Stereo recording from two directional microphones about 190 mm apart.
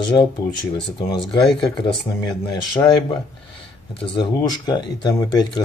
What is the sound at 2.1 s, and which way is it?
Speech, 20° left (ahead or behind).